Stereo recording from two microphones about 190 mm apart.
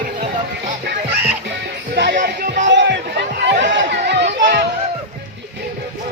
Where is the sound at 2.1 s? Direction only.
40° right (ahead or behind).